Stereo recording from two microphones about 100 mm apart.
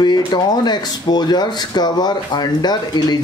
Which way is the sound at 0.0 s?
45° left (ahead or behind).